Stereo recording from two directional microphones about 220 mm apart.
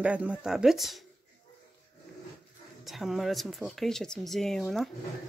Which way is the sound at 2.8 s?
Centre (ahead or behind).